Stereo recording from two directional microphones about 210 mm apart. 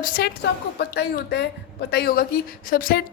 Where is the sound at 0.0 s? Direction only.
45° left (ahead or behind).